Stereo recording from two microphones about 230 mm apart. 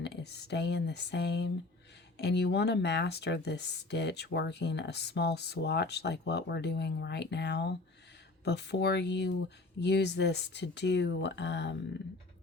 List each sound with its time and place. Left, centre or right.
0.0 s speech: left